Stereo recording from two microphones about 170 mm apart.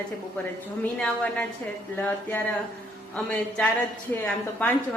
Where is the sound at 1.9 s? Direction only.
10° left (ahead or behind).